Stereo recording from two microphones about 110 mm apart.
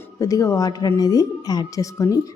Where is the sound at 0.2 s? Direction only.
30° left (ahead or behind).